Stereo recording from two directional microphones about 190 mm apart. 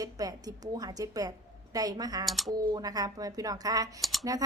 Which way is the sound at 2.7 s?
20° right (ahead or behind).